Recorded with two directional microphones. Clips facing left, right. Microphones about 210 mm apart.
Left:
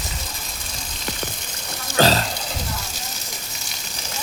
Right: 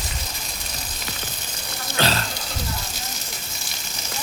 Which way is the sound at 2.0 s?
40° left (ahead or behind).